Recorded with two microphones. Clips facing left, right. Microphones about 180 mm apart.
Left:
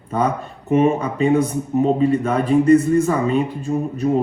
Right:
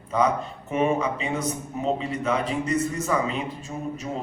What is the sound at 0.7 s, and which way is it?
A man's voice, 55° left (ahead or behind).